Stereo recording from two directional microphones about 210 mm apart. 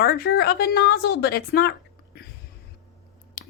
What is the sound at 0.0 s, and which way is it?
A woman's voice, 45° left (ahead or behind).